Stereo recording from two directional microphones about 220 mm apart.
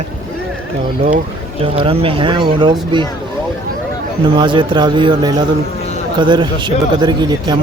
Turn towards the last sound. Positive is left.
turn(degrees=-20)  # may be behind; listen again after turning